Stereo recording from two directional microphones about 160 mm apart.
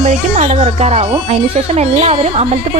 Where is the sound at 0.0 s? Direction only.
45° right (ahead or behind).